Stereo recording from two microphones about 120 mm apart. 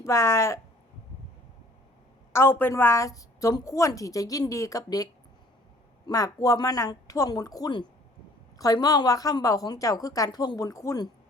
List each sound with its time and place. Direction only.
0.0 s a woman's voice: 25° left (ahead or behind)
2.3 s a woman's voice: 20° left (ahead or behind)
6.1 s a woman's voice: 30° left (ahead or behind)